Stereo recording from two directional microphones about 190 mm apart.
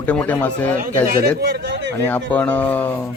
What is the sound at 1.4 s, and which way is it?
Speech, 65° right (ahead or behind).